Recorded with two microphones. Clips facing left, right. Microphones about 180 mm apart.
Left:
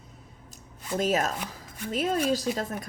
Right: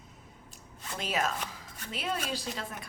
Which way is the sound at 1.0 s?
45° left (ahead or behind).